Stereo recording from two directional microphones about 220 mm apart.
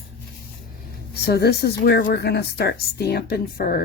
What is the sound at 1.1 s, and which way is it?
A woman's voice, 45° left (ahead or behind).